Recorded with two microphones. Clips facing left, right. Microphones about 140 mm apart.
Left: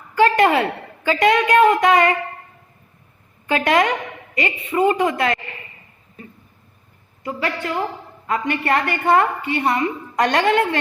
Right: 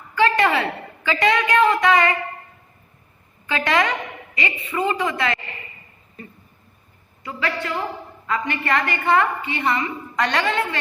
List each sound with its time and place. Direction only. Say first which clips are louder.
0.1 s a woman's voice: left 3 dB; 45° left (ahead or behind)
3.5 s a woman's voice: left 3 dB; 50° left (ahead or behind)
7.3 s a woman's voice: left 2 dB; 45° left (ahead or behind)